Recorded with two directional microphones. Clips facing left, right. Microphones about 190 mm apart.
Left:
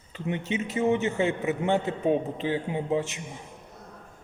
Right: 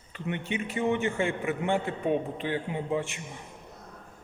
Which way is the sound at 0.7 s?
20° left (ahead or behind).